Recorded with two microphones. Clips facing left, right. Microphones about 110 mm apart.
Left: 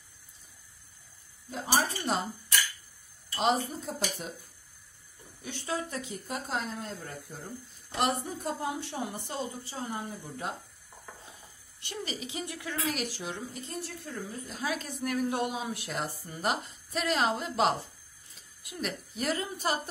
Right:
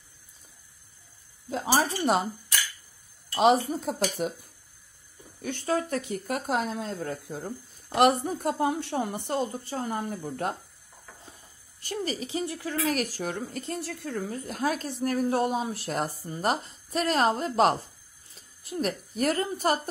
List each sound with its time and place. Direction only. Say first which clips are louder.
3.3 s speech: right 7 dB; 75° right (ahead or behind)
5.4 s speech: right 7 dB; 55° right (ahead or behind)
11.8 s a woman's voice: right 6 dB; 40° right (ahead or behind)
12.8 s speech: right 6 dB; 45° right (ahead or behind); by 14.7 s 65° right (ahead or behind)
14.7 s a woman's voice: right 3 dB; 35° right (ahead or behind)